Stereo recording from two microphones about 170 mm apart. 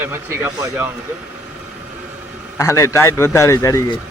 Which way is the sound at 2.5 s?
20° left (ahead or behind).